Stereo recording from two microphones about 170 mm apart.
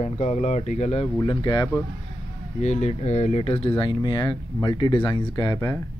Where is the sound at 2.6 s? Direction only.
45° left (ahead or behind).